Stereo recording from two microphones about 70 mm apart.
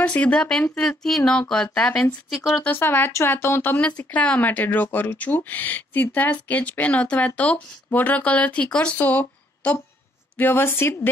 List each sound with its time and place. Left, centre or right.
0.0 s speech: centre
2.6 s speech: left
3.8 s speech: centre
9.0 s a sound: left
10.3 s speech: left